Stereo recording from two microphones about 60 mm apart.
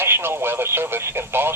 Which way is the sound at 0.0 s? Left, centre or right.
Right.